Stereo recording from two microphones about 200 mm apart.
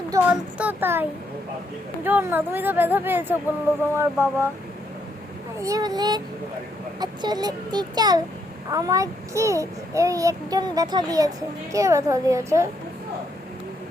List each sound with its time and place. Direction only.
0.3 s a child's voice: 10° right (ahead or behind)
2.0 s a child's voice: 10° right (ahead or behind)
5.6 s a child's voice: 20° right (ahead or behind)